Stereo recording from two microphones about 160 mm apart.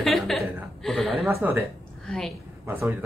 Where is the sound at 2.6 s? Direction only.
15° right (ahead or behind).